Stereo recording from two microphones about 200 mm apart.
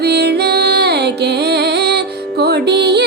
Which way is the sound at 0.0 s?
55° right (ahead or behind).